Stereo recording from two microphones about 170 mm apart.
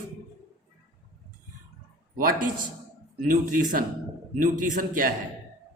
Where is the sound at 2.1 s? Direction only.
55° right (ahead or behind).